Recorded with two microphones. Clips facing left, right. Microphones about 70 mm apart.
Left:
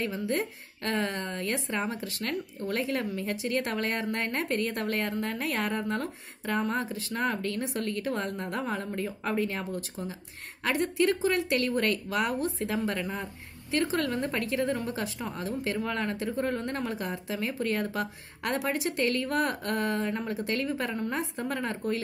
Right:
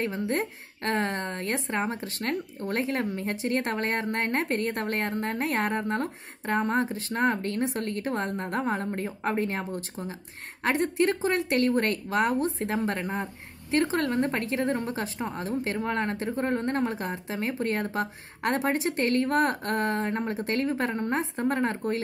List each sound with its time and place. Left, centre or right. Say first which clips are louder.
0.0 s speech: right 2 dB; right